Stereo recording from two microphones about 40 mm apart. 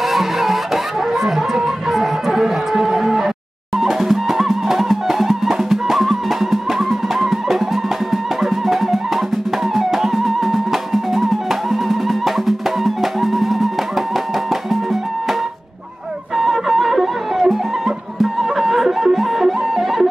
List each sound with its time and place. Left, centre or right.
0.0 s music: centre
16.3 s music: centre